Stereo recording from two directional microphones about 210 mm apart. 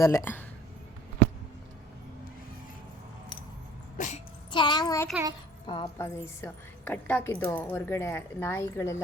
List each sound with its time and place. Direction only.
0.0 s a woman's voice: 10° left (ahead or behind)
3.9 s dog: 35° left (ahead or behind)
4.5 s a sound: 20° left (ahead or behind)
5.6 s a woman's voice: 20° left (ahead or behind)